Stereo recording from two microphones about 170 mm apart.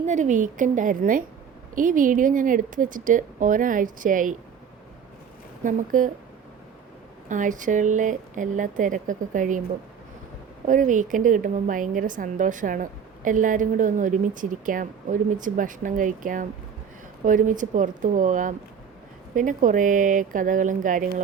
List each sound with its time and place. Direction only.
0.0 s a woman's voice: 45° right (ahead or behind)
5.6 s a woman's voice: 50° right (ahead or behind)
7.3 s a woman's voice: 50° right (ahead or behind)
10.7 s a woman's voice: 50° right (ahead or behind)